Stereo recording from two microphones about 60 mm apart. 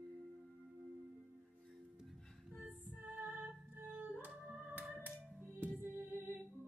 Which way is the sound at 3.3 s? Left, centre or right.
Right.